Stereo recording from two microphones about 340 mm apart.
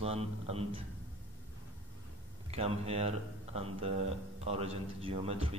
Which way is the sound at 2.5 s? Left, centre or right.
Centre.